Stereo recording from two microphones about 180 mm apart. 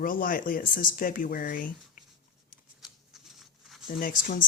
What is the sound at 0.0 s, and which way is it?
Speech, 50° left (ahead or behind).